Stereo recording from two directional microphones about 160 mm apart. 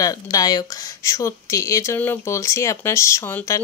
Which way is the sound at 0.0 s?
20° left (ahead or behind).